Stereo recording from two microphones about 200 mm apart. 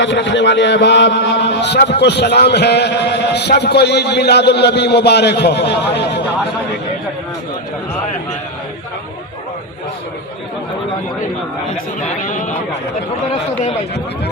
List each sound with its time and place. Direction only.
0.0 s a man's voice: 60° left (ahead or behind)
12.0 s speech: 40° left (ahead or behind)